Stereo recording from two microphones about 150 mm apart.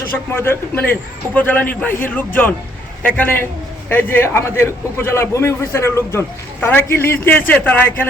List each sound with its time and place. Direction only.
0.3 s a man's voice: 15° left (ahead or behind)